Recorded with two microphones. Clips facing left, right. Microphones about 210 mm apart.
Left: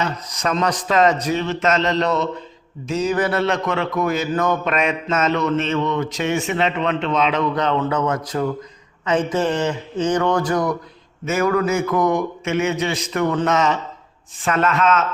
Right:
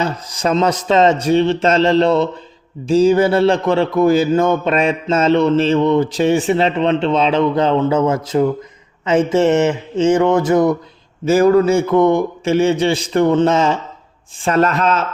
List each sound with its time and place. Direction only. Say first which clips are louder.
0.0 s speech: right 4 dB; 30° right (ahead or behind)